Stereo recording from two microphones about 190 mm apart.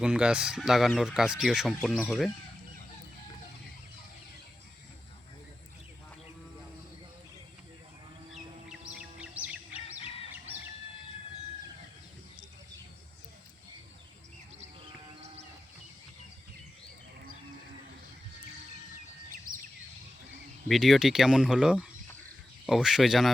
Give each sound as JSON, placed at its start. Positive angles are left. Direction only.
{"t": 0.0, "sound": "speech", "side_deg": -5}
{"t": 9.0, "sound": "bird vocalization", "side_deg": -5}
{"t": 20.7, "sound": "speech", "side_deg": 0}